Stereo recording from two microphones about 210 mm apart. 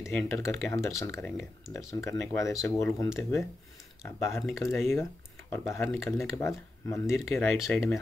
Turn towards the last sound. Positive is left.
turn(degrees=5)  # may be behind; listen again after turning